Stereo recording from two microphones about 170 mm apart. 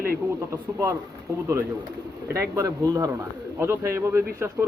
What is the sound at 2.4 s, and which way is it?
Speech, 20° right (ahead or behind).